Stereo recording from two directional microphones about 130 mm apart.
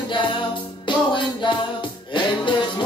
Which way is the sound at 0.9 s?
40° left (ahead or behind).